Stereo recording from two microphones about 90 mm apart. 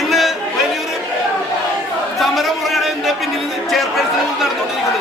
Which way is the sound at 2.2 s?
Centre (ahead or behind).